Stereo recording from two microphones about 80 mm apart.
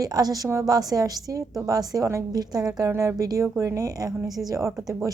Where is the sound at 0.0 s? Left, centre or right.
Right.